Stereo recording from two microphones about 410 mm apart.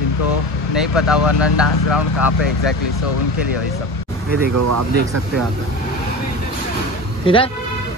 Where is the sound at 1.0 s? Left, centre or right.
Centre.